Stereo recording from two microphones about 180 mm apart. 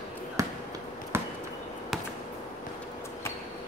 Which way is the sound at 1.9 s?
Centre (ahead or behind).